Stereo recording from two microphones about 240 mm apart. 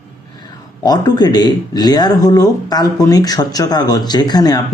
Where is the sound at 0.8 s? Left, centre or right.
Centre.